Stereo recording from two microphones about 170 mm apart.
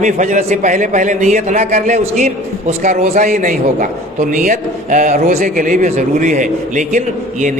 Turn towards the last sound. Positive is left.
turn(degrees=-50)  # may be behind; listen again after turning